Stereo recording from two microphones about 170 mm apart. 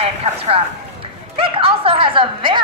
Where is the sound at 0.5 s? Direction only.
35° right (ahead or behind).